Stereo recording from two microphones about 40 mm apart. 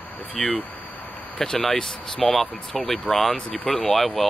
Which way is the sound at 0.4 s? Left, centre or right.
Centre.